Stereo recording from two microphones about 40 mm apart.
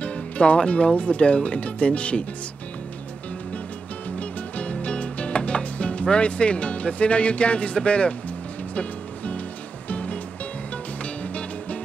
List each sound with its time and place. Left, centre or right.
0.0 s speech: left
4.2 s music: left